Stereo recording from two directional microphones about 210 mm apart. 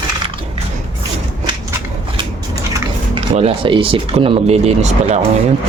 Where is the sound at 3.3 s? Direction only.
25° right (ahead or behind).